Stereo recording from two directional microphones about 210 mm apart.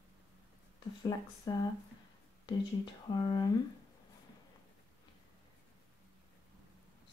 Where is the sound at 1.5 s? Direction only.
20° left (ahead or behind).